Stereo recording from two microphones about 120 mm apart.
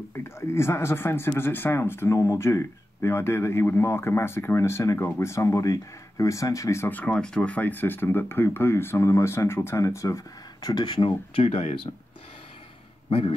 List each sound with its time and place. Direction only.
0.2 s speech: 20° left (ahead or behind); by 11.4 s 40° left (ahead or behind)
11.4 s speech: 55° left (ahead or behind)